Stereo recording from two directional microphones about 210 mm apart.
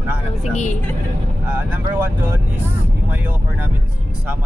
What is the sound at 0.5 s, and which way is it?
Speech, 35° left (ahead or behind).